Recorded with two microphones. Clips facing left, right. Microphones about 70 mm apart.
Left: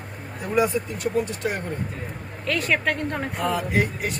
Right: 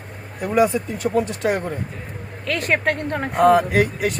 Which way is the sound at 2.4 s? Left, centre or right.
Right.